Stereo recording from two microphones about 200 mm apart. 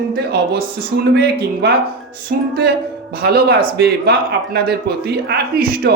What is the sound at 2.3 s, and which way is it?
A man's voice, 50° right (ahead or behind).